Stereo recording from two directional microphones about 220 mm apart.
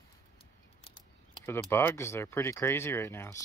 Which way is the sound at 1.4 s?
10° left (ahead or behind).